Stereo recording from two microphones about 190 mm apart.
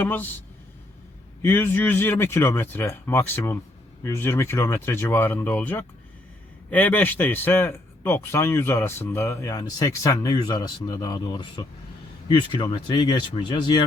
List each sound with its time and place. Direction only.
0.0 s speech: 10° left (ahead or behind)
1.4 s speech: 10° left (ahead or behind)